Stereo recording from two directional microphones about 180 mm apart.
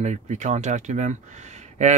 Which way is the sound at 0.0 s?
40° right (ahead or behind).